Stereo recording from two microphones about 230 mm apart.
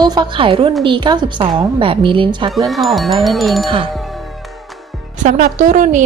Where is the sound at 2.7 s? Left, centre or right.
Centre.